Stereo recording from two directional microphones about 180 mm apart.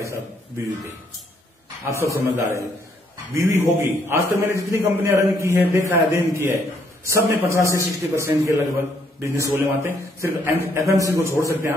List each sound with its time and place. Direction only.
2.0 s a man's voice: 15° right (ahead or behind)